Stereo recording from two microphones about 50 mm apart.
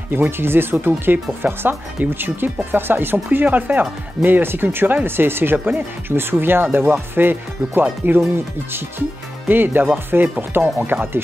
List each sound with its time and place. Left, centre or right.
0.1 s speech: right
9.5 s speech: right